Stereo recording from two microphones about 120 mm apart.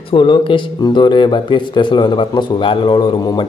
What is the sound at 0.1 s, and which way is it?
Speech, 45° left (ahead or behind).